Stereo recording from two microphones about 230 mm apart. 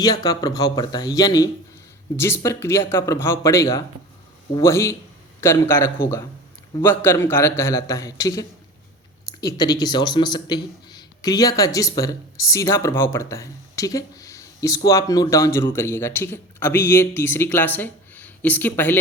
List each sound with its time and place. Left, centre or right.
0.0 s speech: centre